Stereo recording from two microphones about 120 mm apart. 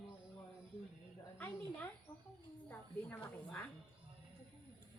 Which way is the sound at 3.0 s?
15° left (ahead or behind).